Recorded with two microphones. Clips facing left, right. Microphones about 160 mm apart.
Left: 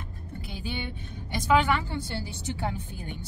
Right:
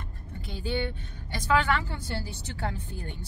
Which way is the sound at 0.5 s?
15° left (ahead or behind).